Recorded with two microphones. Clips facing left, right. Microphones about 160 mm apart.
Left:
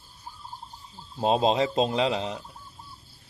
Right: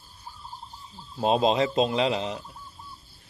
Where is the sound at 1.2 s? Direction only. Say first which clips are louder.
Even; 35° left (ahead or behind).